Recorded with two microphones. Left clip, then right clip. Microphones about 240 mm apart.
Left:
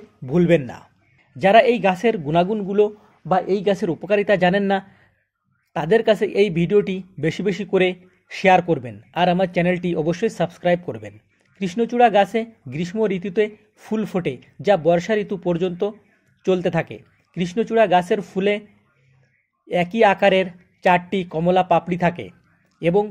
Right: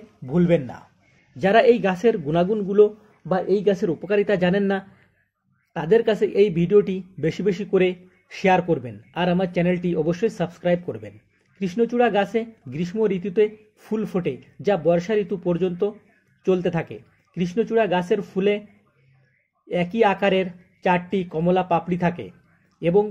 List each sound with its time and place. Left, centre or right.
0.2 s speech: left
19.7 s speech: left